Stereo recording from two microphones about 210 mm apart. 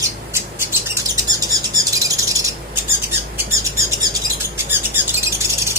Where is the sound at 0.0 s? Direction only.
10° right (ahead or behind).